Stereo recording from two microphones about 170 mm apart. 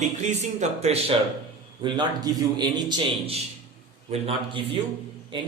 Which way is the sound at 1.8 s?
25° right (ahead or behind).